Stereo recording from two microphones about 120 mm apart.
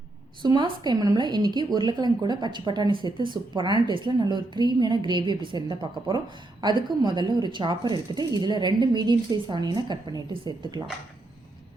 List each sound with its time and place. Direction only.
0.4 s a woman's voice: 35° right (ahead or behind)